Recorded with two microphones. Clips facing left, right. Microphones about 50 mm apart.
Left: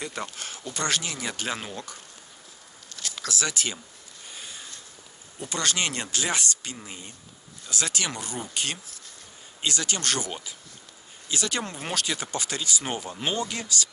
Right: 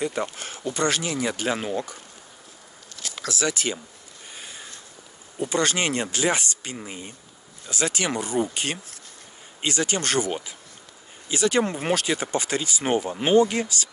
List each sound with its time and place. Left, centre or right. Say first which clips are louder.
0.0 s speech: right 7 dB; centre
3.3 s speech: right 4 dB; centre
4.3 s a sound: right 1 dB; right
5.4 s speech: right 5 dB; right